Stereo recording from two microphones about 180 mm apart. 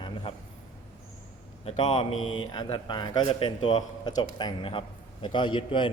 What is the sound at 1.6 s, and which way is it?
A man's voice, 30° left (ahead or behind).